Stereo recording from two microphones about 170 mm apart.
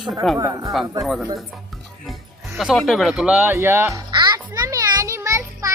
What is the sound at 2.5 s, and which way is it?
Speech, centre (ahead or behind).